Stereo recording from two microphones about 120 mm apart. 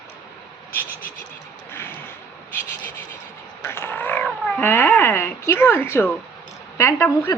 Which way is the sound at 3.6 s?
20° left (ahead or behind).